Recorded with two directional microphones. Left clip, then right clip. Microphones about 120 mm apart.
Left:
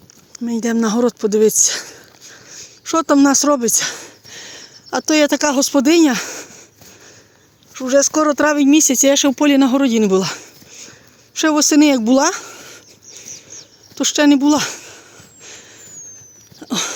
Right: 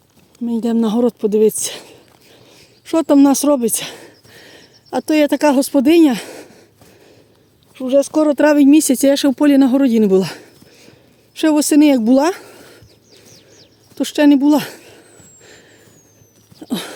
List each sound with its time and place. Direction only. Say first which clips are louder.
0.6 s speech: even; 30° right (ahead or behind)
2.5 s a sound: even; 45° right (ahead or behind)
7.7 s a woman's voice: even; 30° right (ahead or behind)
13.1 s bird: left 9 dB; 30° right (ahead or behind)
13.9 s speech: even; 40° right (ahead or behind)
16.6 s a sound: left 4 dB; 35° right (ahead or behind)